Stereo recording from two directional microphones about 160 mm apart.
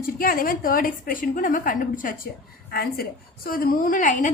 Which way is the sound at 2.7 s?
75° left (ahead or behind).